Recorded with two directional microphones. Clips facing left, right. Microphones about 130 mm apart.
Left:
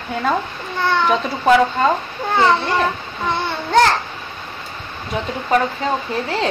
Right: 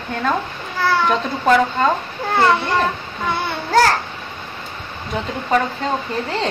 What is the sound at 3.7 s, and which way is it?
Babbling, 5° right (ahead or behind).